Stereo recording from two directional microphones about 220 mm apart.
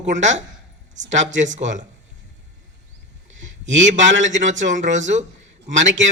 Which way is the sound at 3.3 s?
55° right (ahead or behind).